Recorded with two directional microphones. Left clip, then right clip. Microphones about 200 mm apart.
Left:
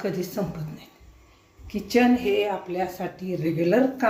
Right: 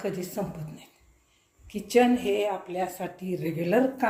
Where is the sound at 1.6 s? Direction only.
10° right (ahead or behind).